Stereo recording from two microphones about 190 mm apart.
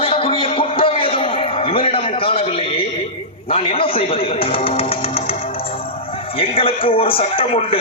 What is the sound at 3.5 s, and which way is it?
Speech, 30° left (ahead or behind).